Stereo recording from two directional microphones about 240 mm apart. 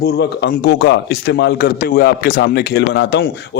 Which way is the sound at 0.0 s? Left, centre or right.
Left.